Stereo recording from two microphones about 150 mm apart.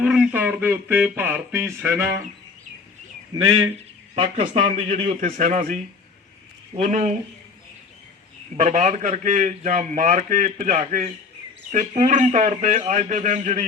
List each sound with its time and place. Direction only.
0.0 s speech: 5° right (ahead or behind)
3.3 s speech: 25° right (ahead or behind)
4.1 s speech: 45° right (ahead or behind); by 5.7 s 60° right (ahead or behind)
6.7 s speech: 55° right (ahead or behind)
8.5 s a man's voice: 55° right (ahead or behind)